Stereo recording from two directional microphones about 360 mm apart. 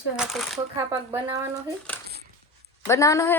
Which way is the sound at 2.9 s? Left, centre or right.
Centre.